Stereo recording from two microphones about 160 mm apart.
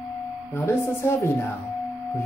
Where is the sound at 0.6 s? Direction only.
15° left (ahead or behind).